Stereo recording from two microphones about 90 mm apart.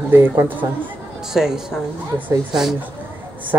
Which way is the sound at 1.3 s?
5° right (ahead or behind).